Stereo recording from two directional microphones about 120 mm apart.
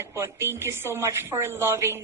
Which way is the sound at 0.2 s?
20° right (ahead or behind).